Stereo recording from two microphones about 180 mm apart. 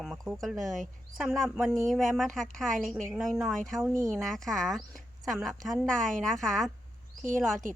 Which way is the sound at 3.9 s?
15° right (ahead or behind).